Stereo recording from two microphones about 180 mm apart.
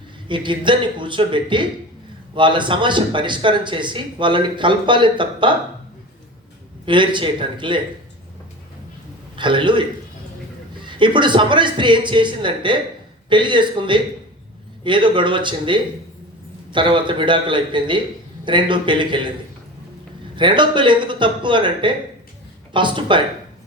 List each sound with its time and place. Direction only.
0.3 s speech: 25° right (ahead or behind)
6.8 s speech: 25° right (ahead or behind)
9.3 s a man's voice: 25° right (ahead or behind)
10.8 s speech: 25° right (ahead or behind)
20.3 s speech: 25° right (ahead or behind)